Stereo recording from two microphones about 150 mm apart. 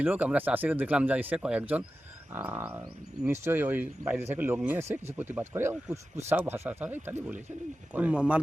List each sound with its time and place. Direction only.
0.0 s speech: 10° right (ahead or behind)